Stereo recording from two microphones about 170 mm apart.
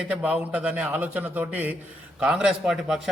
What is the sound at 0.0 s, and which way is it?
A man's voice, 5° right (ahead or behind).